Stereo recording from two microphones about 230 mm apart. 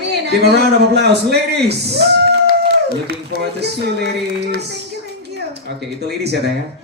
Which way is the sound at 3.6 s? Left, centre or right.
Right.